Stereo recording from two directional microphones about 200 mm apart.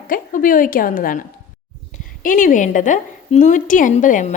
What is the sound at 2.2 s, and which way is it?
A woman's voice, 40° left (ahead or behind).